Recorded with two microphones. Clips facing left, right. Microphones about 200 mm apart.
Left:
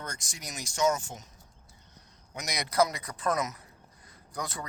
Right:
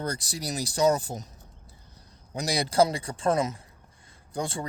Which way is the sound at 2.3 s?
30° right (ahead or behind).